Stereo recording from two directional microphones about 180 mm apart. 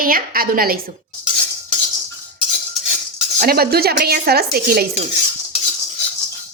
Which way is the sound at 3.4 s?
60° right (ahead or behind).